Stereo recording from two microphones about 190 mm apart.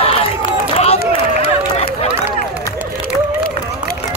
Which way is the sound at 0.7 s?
30° left (ahead or behind).